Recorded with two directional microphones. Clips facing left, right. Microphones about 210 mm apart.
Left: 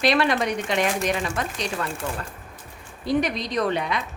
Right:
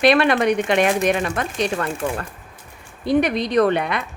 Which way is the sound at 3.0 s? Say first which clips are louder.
Right 5 dB; 60° right (ahead or behind).